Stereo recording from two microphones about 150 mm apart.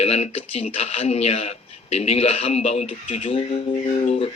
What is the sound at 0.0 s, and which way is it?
Speech, 45° left (ahead or behind).